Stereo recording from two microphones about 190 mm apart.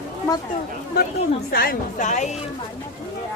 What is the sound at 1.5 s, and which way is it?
Speech, 50° left (ahead or behind).